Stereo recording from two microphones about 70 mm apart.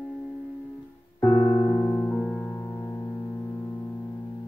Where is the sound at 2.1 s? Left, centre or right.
Centre.